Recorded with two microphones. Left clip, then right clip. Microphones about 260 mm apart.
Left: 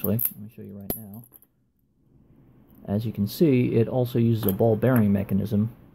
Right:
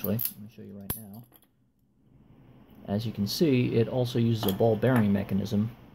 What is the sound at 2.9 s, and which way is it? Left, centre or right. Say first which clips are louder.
Speech: left 2 dB; centre.